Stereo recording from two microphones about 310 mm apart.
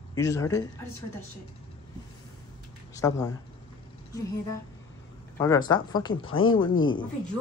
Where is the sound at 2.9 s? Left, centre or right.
Centre.